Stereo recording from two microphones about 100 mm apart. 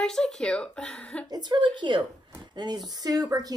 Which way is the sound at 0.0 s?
5° left (ahead or behind).